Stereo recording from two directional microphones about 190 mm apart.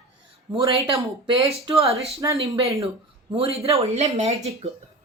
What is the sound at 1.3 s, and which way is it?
Speech, 25° right (ahead or behind).